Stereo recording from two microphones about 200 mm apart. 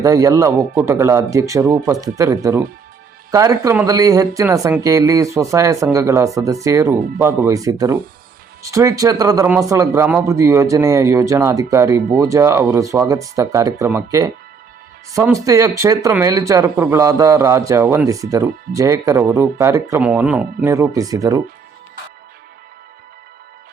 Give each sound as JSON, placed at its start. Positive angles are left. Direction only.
{"t": 0.0, "sound": "speech", "side_deg": -15}